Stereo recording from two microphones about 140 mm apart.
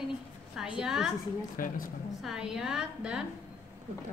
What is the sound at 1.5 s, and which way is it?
Speech, 80° left.